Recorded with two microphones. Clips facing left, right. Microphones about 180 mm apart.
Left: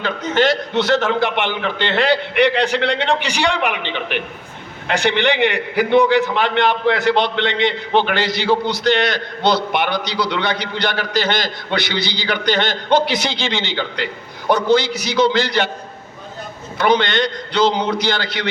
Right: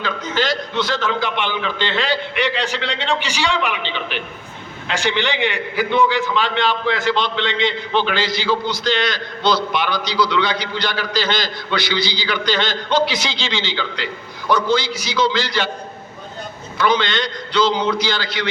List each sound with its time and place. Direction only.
0.0 s a man's voice: 65° left (ahead or behind)
16.7 s a man's voice: 55° left (ahead or behind)